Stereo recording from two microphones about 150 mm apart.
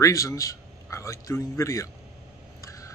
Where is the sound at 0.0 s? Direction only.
20° left (ahead or behind).